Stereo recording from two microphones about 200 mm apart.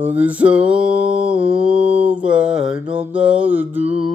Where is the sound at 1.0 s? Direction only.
25° right (ahead or behind).